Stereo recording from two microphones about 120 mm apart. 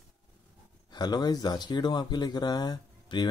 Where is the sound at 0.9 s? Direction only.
35° left (ahead or behind).